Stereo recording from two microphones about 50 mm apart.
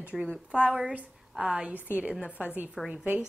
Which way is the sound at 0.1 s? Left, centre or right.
Centre.